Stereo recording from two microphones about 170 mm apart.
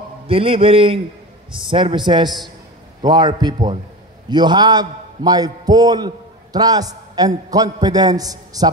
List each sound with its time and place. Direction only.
0.3 s a man's voice: 30° right (ahead or behind)